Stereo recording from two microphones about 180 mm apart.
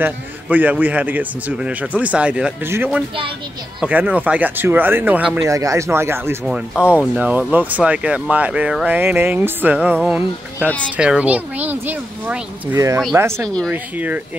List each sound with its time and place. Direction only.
0.0 s speech: 10° right (ahead or behind)